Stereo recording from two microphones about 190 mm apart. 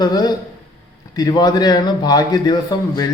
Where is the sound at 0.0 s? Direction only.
20° left (ahead or behind).